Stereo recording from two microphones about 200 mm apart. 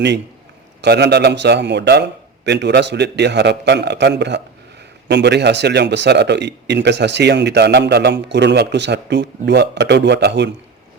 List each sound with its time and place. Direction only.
0.8 s a man's voice: 55° right (ahead or behind)